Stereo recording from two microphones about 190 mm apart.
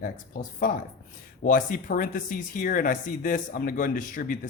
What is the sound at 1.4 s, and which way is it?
Speech, 45° left (ahead or behind).